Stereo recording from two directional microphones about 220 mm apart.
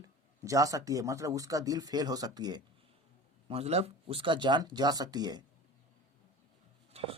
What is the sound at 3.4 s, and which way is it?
Speech, 25° right (ahead or behind).